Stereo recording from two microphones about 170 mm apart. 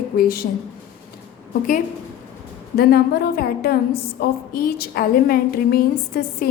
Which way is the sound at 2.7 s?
65° left (ahead or behind).